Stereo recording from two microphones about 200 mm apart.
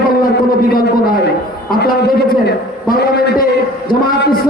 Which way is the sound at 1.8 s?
50° left (ahead or behind).